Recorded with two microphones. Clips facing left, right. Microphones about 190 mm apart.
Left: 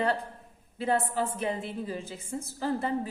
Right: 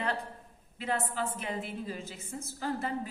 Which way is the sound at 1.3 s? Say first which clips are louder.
Left 5 dB; 30° left (ahead or behind).